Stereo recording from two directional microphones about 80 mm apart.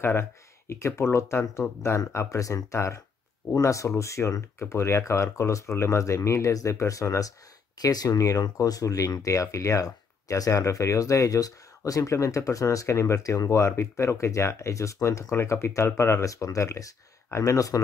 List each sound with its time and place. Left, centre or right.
0.0 s speech: left